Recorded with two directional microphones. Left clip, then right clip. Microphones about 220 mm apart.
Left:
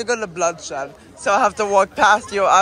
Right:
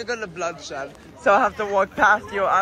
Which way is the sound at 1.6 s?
15° left (ahead or behind).